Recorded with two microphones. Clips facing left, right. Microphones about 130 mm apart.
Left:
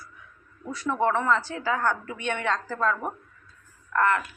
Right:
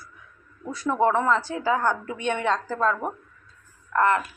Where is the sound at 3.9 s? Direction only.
25° right (ahead or behind).